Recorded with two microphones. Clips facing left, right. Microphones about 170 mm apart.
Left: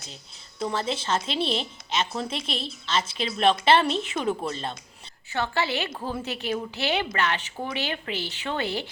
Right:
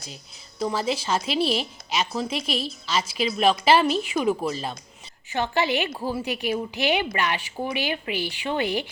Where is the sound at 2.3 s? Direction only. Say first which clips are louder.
Right 4 dB; 25° left (ahead or behind).